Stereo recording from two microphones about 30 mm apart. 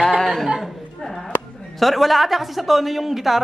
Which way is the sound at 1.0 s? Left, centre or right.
Centre.